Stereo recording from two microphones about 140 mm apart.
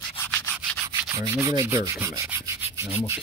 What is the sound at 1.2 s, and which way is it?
Rub, 25° right (ahead or behind).